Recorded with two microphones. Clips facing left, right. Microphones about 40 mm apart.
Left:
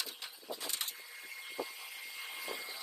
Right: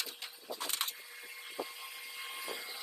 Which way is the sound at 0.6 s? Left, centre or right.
Right.